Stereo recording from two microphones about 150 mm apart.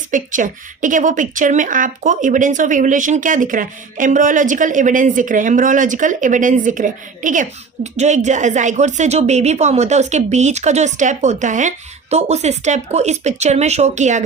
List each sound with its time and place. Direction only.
0.1 s a woman's voice: 60° right (ahead or behind)